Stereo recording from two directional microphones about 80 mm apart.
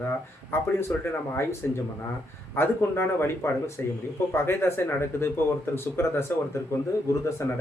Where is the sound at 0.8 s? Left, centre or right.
Left.